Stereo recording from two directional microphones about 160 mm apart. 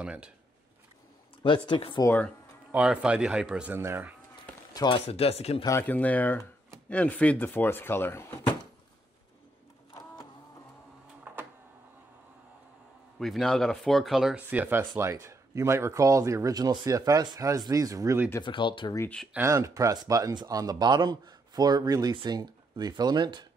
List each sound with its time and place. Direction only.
0.0 s speech: 5° right (ahead or behind)
1.7 s speech: 30° left (ahead or behind)
2.0 s speech: 10° left (ahead or behind)
2.7 s speech: 5° right (ahead or behind)
4.7 s speech: 30° left (ahead or behind)
5.6 s speech: 15° left (ahead or behind)
11.3 s a sound: 10° right (ahead or behind)
13.2 s speech: centre (ahead or behind); by 18.3 s 15° right (ahead or behind)
18.4 s speech: 30° left (ahead or behind)
18.9 s speech: 10° left (ahead or behind)
19.3 s speech: 15° right (ahead or behind)